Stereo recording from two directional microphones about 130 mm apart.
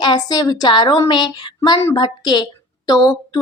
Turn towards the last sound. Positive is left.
turn(degrees=30)  # may be behind; listen again after turning